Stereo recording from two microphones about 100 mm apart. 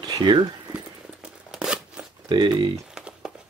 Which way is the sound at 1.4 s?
5° right (ahead or behind).